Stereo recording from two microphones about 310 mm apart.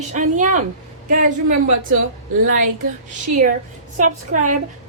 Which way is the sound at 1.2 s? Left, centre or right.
Right.